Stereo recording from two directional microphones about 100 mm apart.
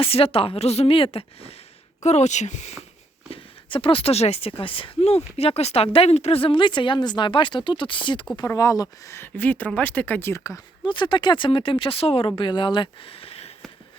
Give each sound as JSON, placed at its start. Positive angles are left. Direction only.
{"t": 0.0, "sound": "a woman's voice", "side_deg": 75}
{"t": 3.2, "sound": "speech", "side_deg": 65}
{"t": 8.5, "sound": "speech", "side_deg": 40}
{"t": 9.1, "sound": "speech", "side_deg": 20}
{"t": 10.8, "sound": "speech", "side_deg": 50}
{"t": 12.4, "sound": "speech", "side_deg": 50}